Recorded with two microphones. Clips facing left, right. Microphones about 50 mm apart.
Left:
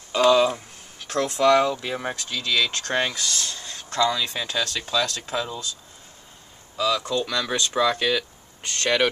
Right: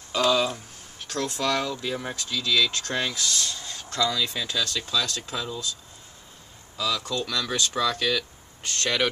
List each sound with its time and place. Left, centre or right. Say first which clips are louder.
0.1 s speech: left 5 dB; centre
3.2 s speech: even; centre
4.6 s speech: left 2 dB; left
5.0 s speech: left 4 dB; centre
5.3 s speech: left 4 dB; left
6.8 s speech: left 5 dB; centre